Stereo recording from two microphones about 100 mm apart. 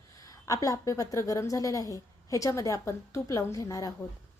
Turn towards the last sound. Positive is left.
turn(degrees=35)  # may be behind; listen again after turning